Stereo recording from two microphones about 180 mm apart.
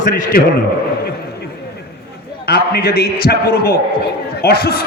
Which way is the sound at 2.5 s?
60° left (ahead or behind).